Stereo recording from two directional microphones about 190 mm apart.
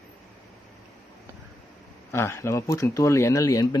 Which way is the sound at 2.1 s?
15° left (ahead or behind).